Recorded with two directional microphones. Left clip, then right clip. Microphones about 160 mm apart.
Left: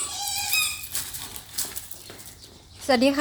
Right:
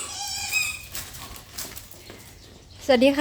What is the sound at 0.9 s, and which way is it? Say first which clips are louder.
Patter: left 3 dB; 5° right (ahead or behind).